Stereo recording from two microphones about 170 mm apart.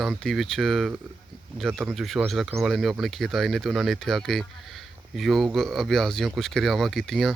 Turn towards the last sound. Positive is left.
turn(degrees=0)  # may be behind; listen again after turning